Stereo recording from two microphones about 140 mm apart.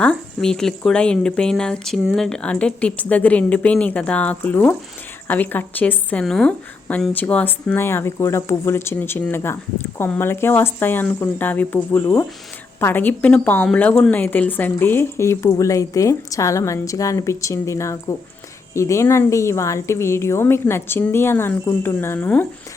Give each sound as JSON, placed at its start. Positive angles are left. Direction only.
{"t": 0.0, "sound": "a woman's voice", "side_deg": 5}